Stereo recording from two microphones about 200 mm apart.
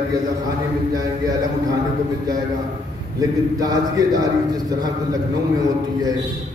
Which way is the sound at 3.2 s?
20° right (ahead or behind).